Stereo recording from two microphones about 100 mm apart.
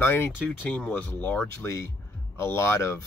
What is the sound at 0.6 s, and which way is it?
Speech, 10° left (ahead or behind).